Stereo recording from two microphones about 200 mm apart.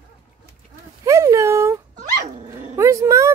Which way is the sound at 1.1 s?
15° right (ahead or behind).